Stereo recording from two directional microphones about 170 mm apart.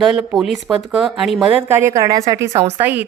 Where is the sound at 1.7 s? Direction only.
15° right (ahead or behind).